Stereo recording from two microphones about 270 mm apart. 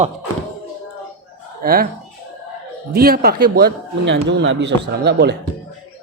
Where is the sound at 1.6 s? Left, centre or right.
Right.